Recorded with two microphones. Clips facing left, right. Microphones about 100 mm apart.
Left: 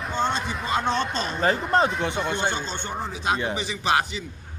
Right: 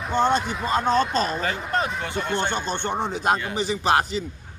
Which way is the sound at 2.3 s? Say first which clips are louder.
Right 1 dB; 15° left (ahead or behind).